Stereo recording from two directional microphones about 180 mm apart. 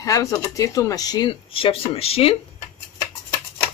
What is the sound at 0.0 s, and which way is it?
Speech, 20° left (ahead or behind).